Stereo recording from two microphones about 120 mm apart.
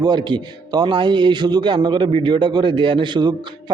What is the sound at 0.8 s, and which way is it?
A man's voice, 40° right (ahead or behind).